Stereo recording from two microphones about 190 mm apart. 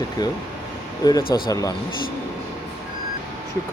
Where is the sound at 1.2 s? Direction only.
50° left (ahead or behind).